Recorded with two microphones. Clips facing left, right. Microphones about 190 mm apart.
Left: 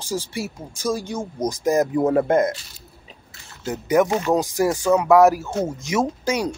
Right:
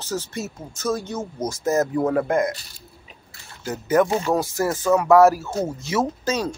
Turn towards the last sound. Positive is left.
turn(degrees=10)  # may be behind; listen again after turning